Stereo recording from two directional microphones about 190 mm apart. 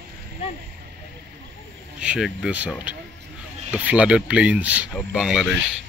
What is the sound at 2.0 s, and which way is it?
Speech, 5° right (ahead or behind).